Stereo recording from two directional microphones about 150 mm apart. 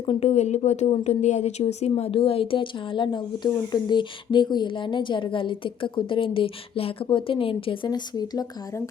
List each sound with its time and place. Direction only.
0.0 s speech: 40° left (ahead or behind); by 8.8 s 25° left (ahead or behind)